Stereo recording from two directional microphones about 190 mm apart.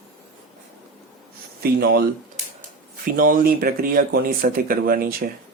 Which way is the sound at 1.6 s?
55° right (ahead or behind).